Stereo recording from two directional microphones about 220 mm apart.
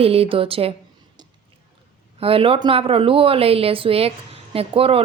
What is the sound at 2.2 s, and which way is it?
A woman's voice, 25° right (ahead or behind).